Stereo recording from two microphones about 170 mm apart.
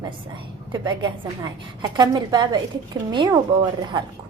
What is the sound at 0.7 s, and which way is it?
A woman's voice, 25° right (ahead or behind).